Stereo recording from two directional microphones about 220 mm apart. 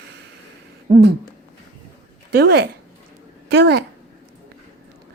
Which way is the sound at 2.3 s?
45° right (ahead or behind).